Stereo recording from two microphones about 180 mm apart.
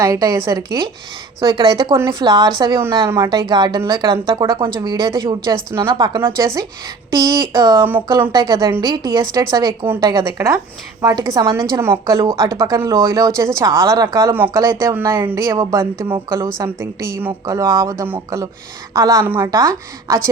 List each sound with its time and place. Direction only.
0.0 s a woman's voice: 20° right (ahead or behind)